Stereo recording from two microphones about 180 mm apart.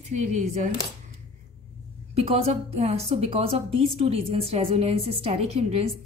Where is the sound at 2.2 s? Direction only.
35° right (ahead or behind).